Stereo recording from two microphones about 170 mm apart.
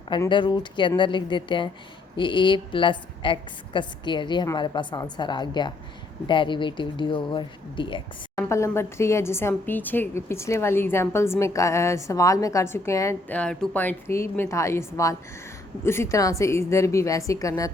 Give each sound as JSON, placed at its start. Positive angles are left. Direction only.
{"t": 0.3, "sound": "a woman's voice", "side_deg": 25}
{"t": 8.4, "sound": "a woman's voice", "side_deg": 15}